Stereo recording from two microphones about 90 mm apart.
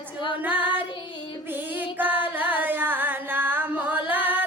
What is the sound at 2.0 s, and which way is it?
Music, 20° right (ahead or behind).